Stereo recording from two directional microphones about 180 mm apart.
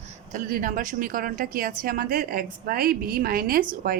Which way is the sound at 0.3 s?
50° right (ahead or behind).